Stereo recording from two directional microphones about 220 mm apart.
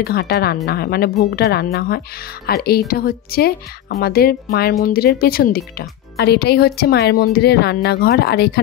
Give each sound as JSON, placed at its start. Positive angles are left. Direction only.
{"t": 0.0, "sound": "speech", "side_deg": 45}